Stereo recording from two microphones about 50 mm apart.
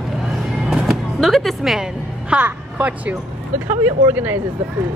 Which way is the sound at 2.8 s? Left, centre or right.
Right.